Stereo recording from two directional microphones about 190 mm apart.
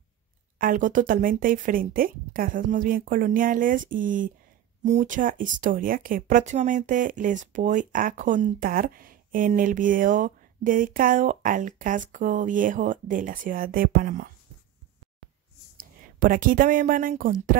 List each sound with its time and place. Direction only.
0.6 s speech: 45° right (ahead or behind)
15.8 s speech: 45° right (ahead or behind)